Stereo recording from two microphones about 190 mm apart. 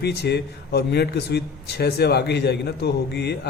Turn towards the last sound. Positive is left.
turn(degrees=60)  # may be behind; listen again after turning